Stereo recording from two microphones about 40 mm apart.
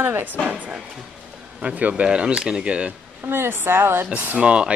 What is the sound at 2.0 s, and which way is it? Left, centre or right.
Speech, right.